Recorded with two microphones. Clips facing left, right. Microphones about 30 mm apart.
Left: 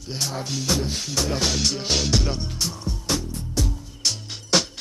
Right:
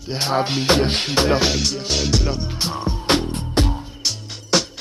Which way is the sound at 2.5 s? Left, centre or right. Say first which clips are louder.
Right 5 dB; right.